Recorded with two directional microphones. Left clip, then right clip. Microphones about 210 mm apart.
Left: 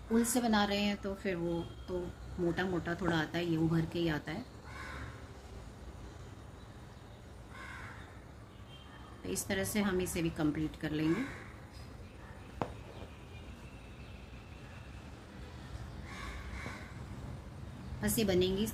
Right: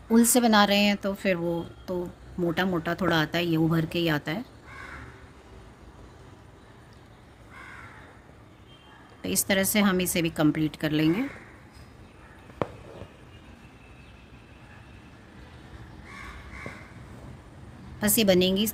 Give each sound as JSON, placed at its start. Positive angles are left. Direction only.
{"t": 0.1, "sound": "speech", "side_deg": -55}
{"t": 9.2, "sound": "speech", "side_deg": -55}
{"t": 12.6, "sound": "a sound", "side_deg": -15}
{"t": 18.0, "sound": "speech", "side_deg": -55}